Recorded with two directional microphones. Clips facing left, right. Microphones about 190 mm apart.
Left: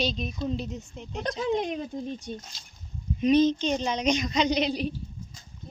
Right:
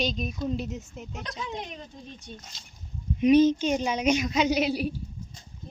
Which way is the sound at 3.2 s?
10° right (ahead or behind).